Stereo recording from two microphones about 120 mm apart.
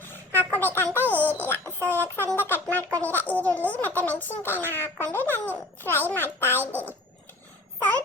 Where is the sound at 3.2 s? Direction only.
10° left (ahead or behind).